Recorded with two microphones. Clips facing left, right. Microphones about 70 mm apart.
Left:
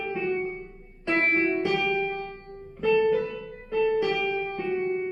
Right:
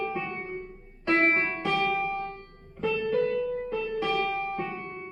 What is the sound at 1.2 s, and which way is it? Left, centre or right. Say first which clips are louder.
Music: left 2 dB; centre.